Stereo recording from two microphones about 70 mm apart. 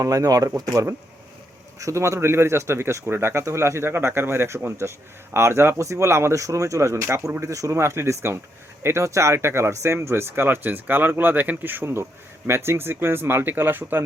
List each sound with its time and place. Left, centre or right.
0.0 s speech: right